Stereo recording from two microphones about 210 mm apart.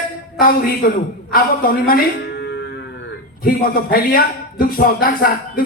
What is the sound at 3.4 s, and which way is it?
A man's voice, 45° left (ahead or behind).